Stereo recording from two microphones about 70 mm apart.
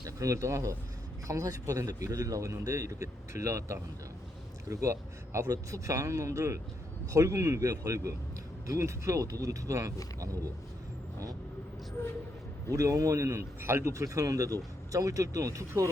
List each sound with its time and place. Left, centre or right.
0.0 s a man's voice: right
12.7 s a man's voice: right